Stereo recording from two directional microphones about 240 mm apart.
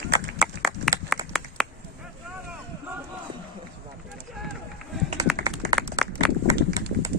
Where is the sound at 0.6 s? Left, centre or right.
Centre.